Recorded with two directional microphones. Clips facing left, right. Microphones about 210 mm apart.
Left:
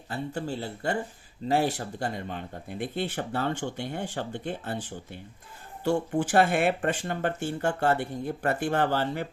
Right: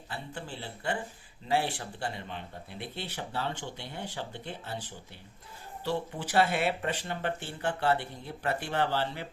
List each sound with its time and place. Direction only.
0.1 s speech: 40° left (ahead or behind)
5.8 s speech: 50° left (ahead or behind)